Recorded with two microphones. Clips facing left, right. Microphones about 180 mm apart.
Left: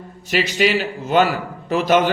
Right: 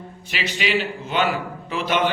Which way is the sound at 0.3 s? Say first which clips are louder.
Left 7 dB; 45° left (ahead or behind).